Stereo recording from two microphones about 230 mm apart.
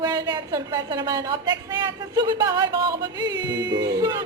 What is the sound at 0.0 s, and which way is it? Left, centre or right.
Speech, centre.